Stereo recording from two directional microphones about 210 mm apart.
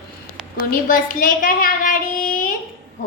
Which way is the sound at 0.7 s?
40° left (ahead or behind).